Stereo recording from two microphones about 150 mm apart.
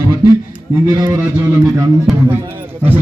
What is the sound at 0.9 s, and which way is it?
Speech, 25° right (ahead or behind).